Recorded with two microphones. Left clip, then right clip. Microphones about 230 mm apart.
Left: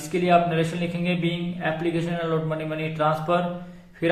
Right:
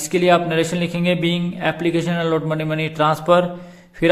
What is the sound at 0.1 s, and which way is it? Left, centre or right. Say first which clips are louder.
A man's voice: right 4 dB; right.